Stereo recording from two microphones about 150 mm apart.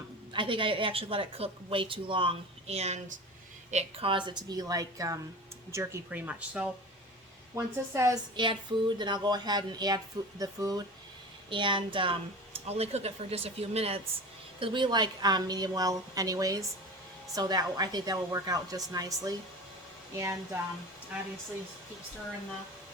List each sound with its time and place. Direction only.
0.3 s a woman's voice: 35° right (ahead or behind)
4.1 s speech: 30° right (ahead or behind); by 6.7 s 10° right (ahead or behind)
7.5 s a woman's voice: 20° right (ahead or behind); by 14.0 s 40° right (ahead or behind)
14.6 s speech: 30° right (ahead or behind)